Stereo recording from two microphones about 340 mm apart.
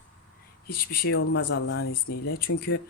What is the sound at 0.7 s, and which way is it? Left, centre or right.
Speech, left.